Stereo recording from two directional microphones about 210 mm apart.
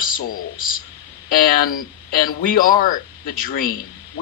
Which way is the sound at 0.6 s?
40° left (ahead or behind).